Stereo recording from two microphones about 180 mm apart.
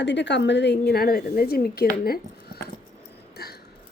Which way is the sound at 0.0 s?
75° left (ahead or behind).